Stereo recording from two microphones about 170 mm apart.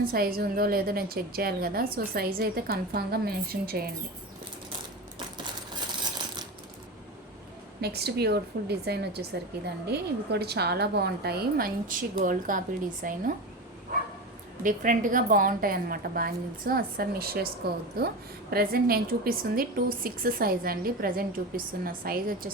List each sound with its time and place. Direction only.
0.0 s a woman's voice: 60° right (ahead or behind)
6.1 s ratchet: 25° right (ahead or behind)
7.8 s speech: 70° right (ahead or behind); by 13.3 s 50° right (ahead or behind)
14.6 s a woman's voice: 50° right (ahead or behind)